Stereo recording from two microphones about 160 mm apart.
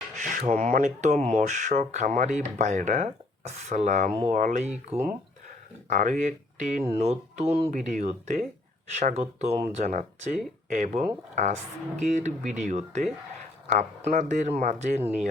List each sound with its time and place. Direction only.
0.2 s speech: 50° right (ahead or behind)
4.9 s speech: 40° right (ahead or behind)
5.9 s speech: 55° right (ahead or behind)
7.7 s speech: 55° right (ahead or behind)